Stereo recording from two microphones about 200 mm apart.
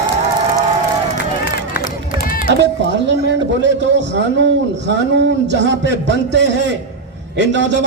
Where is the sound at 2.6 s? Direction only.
60° right (ahead or behind).